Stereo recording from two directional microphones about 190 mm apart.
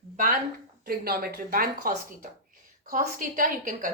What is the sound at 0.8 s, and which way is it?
A woman's voice, 50° right (ahead or behind).